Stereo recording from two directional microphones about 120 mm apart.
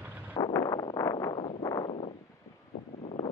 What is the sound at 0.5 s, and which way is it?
Wind noise, 30° left (ahead or behind).